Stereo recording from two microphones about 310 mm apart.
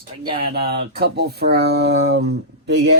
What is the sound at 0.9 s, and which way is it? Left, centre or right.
Speech, right.